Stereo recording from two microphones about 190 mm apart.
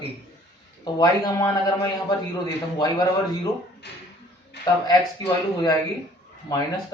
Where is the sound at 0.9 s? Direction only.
15° left (ahead or behind).